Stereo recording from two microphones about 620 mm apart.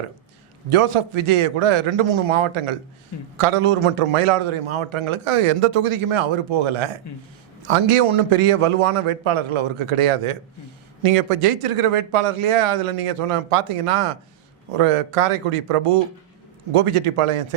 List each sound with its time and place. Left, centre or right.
0.7 s a man's voice: right